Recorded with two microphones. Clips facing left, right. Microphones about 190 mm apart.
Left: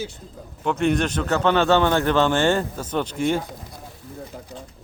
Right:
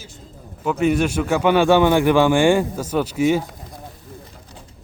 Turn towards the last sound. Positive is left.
turn(degrees=-10)  # may be behind; listen again after turning